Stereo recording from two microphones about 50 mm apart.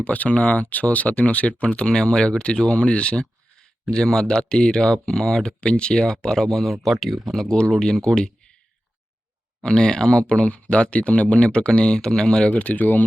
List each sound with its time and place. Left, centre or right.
0.0 s speech: left
1.6 s speech: centre
7.4 s speech: centre
9.6 s speech: centre
12.5 s speech: left